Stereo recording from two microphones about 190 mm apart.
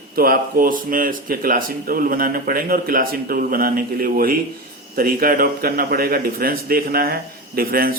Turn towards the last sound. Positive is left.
turn(degrees=-50)  # may be behind; listen again after turning